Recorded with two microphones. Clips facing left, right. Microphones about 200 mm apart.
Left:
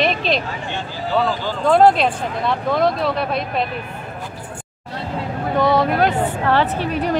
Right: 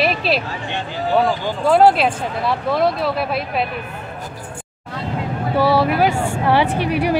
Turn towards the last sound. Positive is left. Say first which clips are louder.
# right 2 dB
turn(degrees=-10)  # may be behind; listen again after turning